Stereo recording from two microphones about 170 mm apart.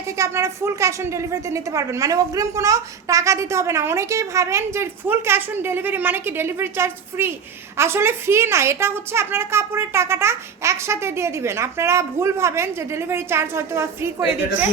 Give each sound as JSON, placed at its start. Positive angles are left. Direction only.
{"t": 0.2, "sound": "a woman's voice", "side_deg": -15}